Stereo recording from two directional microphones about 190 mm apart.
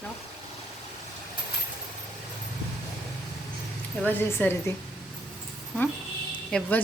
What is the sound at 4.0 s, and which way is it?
Speech, 10° left (ahead or behind).